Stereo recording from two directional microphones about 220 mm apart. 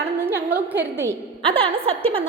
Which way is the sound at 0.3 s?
10° right (ahead or behind).